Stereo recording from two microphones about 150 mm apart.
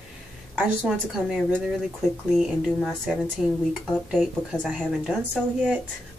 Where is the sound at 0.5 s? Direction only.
5° right (ahead or behind).